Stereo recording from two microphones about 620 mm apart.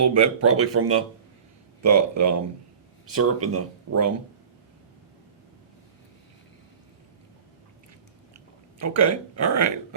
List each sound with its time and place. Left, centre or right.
0.0 s speech: right
8.8 s speech: right